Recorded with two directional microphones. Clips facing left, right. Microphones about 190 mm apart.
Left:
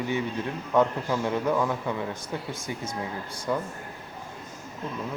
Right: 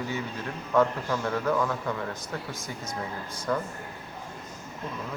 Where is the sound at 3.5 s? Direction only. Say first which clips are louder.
Even; 15° left (ahead or behind).